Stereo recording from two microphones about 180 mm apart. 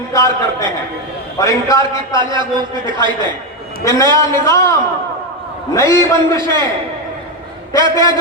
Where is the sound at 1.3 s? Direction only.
20° left (ahead or behind).